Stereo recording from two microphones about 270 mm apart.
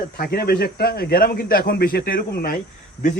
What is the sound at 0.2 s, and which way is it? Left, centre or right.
A man's voice, left.